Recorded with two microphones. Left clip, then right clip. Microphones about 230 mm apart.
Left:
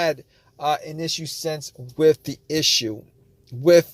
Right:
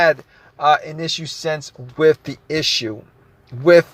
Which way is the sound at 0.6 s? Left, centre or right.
Left.